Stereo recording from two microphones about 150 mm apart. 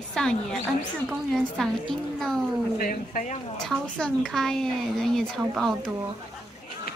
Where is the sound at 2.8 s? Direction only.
65° left (ahead or behind).